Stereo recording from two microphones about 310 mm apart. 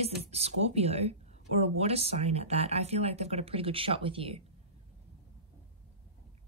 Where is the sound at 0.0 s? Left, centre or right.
Centre.